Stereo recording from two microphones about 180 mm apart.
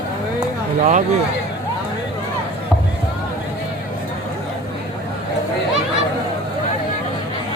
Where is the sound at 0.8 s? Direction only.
45° right (ahead or behind).